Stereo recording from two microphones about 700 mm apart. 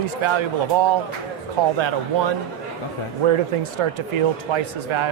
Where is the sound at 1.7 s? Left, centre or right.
Right.